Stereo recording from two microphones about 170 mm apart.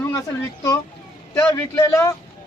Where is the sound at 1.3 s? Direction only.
15° left (ahead or behind).